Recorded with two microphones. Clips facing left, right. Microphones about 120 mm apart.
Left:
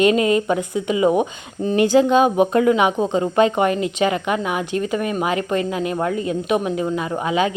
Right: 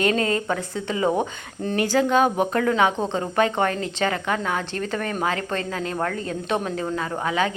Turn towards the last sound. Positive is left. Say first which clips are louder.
# left 4 dB
turn(degrees=20)  # may be behind; listen again after turning